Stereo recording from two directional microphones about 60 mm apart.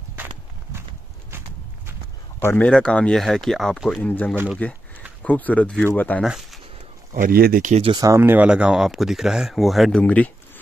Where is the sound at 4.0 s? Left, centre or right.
Left.